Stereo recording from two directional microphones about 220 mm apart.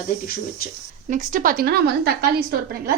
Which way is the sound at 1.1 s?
35° right (ahead or behind).